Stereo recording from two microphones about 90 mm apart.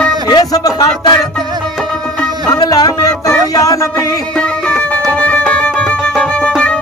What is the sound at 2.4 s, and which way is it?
Music, 50° left (ahead or behind).